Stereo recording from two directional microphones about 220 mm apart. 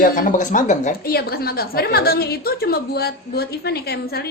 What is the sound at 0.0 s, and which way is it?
A woman's voice, 35° left (ahead or behind).